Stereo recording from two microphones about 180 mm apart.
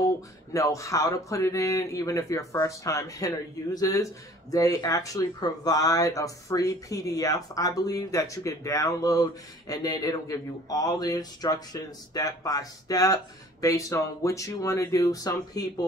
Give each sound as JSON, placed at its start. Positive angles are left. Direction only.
{"t": 0.5, "sound": "speech", "side_deg": 15}